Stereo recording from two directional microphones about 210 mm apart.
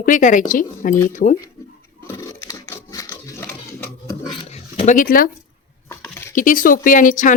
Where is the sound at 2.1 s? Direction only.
15° left (ahead or behind).